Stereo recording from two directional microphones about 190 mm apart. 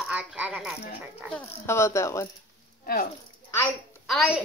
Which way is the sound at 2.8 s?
50° left (ahead or behind).